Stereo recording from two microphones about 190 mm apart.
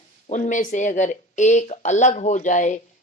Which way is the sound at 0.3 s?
40° left (ahead or behind).